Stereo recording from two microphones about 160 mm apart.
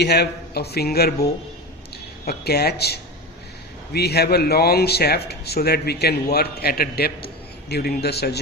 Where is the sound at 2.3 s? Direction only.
80° left.